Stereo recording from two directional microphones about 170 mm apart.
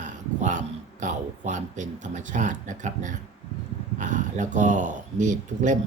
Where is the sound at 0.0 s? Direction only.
45° right (ahead or behind).